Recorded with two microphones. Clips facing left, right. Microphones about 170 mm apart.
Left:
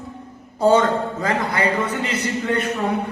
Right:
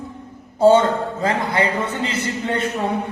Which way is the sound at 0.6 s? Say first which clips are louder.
Right 2 dB; 30° right (ahead or behind).